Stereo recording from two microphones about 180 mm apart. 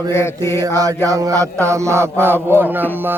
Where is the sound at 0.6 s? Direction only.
20° right (ahead or behind).